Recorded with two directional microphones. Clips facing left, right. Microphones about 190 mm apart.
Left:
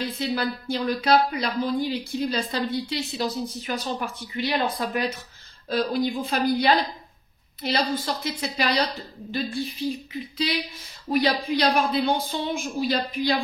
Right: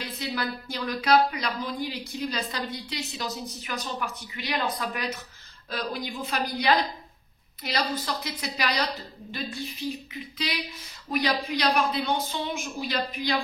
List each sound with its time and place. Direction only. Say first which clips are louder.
0.0 s a woman's voice: left 5 dB; 30° left (ahead or behind)
7.9 s a woman's voice: left 4 dB; 25° left (ahead or behind)